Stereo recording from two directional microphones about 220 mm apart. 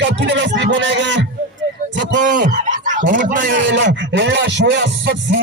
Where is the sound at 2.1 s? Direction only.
35° right (ahead or behind).